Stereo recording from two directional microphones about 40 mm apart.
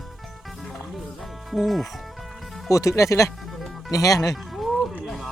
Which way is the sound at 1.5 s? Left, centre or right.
Centre.